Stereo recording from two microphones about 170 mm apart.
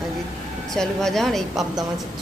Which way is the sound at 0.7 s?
Centre (ahead or behind).